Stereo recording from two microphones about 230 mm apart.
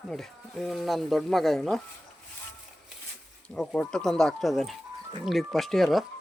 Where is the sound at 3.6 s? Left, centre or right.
Centre.